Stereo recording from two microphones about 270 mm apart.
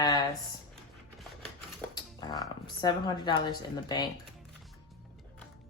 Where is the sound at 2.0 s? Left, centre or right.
Centre.